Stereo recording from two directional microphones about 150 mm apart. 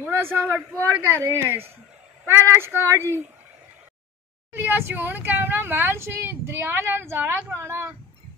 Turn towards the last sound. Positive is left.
turn(degrees=-15)  # may be behind; listen again after turning